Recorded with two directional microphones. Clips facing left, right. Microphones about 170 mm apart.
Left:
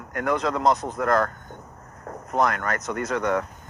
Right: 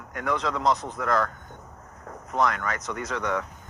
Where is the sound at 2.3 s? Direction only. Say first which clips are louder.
Left 2 dB; 50° left (ahead or behind).